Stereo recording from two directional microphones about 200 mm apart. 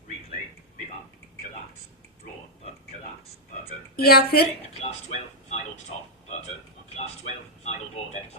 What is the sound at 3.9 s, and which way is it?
Speech, 50° left (ahead or behind).